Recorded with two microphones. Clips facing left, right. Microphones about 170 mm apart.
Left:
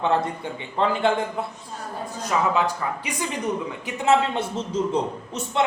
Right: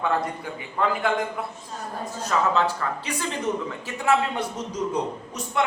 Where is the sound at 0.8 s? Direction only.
25° left (ahead or behind).